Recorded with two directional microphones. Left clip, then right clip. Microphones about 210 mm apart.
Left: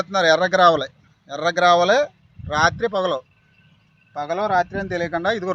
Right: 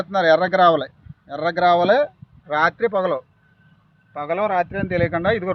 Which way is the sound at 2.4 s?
10° right (ahead or behind).